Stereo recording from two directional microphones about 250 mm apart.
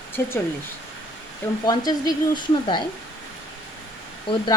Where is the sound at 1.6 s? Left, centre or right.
Centre.